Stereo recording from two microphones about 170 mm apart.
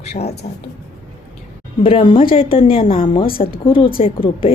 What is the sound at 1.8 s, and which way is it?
A woman's voice, 30° left (ahead or behind).